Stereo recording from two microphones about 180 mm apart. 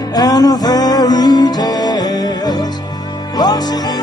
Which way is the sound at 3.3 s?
20° left (ahead or behind).